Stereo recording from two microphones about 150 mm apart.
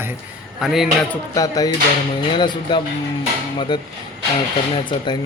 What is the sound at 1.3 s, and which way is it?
Speech, 25° left (ahead or behind).